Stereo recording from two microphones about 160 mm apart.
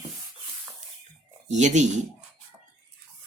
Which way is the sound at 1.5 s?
45° right (ahead or behind).